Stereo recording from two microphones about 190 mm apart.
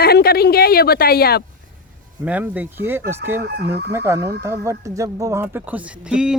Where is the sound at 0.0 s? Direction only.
55° left (ahead or behind).